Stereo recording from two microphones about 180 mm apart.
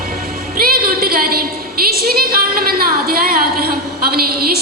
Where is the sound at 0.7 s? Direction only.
55° right (ahead or behind).